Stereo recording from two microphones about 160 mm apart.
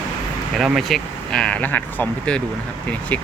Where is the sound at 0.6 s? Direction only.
Centre (ahead or behind).